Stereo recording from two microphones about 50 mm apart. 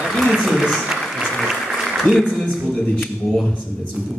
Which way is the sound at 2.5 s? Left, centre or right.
Centre.